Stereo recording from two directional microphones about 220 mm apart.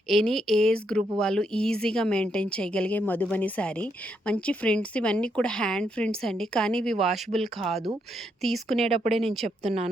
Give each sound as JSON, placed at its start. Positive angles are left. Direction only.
{"t": 0.1, "sound": "speech", "side_deg": 0}
{"t": 9.6, "sound": "a woman's voice", "side_deg": -30}